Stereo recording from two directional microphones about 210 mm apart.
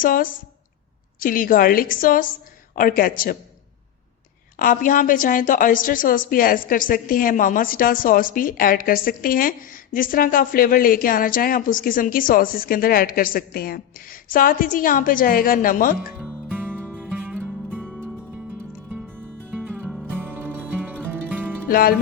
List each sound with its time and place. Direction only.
0.0 s a woman's voice: 40° left (ahead or behind)
4.5 s a woman's voice: 40° left (ahead or behind)
16.1 s music: 5° right (ahead or behind)
16.8 s music: 5° left (ahead or behind)
17.7 s music: 10° right (ahead or behind)
19.8 s music: 5° right (ahead or behind)
21.7 s speech: 45° left (ahead or behind)